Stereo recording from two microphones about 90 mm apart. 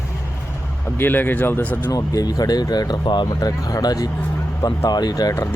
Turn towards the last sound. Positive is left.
turn(degrees=45)  # may be behind; listen again after turning